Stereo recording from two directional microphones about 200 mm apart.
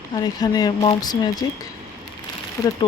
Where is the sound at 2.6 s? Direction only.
15° left (ahead or behind).